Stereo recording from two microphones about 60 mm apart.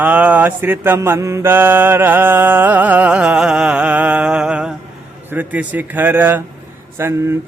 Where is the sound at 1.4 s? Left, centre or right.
Right.